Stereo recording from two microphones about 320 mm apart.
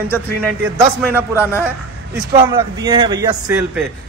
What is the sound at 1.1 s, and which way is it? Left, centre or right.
A man's voice, centre.